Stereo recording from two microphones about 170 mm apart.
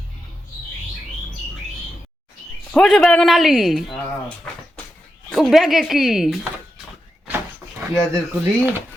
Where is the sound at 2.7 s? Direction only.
5° left (ahead or behind).